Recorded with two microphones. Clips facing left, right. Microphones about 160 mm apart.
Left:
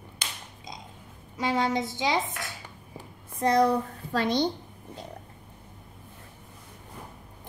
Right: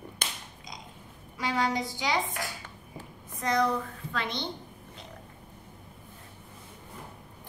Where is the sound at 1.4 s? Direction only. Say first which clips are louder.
Left 3 dB; 25° left (ahead or behind).